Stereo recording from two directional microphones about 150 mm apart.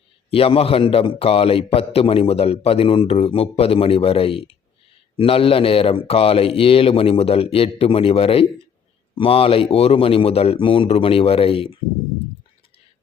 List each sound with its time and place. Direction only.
0.3 s a man's voice: 40° left (ahead or behind)